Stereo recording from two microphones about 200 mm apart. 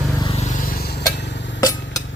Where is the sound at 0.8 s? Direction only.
55° left (ahead or behind).